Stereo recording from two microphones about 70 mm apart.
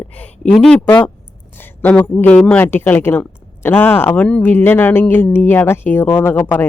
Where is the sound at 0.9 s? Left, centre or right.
Left.